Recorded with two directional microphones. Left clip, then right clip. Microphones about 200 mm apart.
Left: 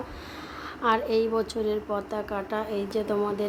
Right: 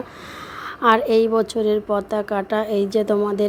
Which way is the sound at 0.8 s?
35° right (ahead or behind).